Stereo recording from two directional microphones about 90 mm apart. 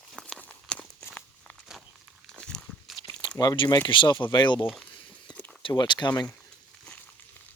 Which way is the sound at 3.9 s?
65° left (ahead or behind).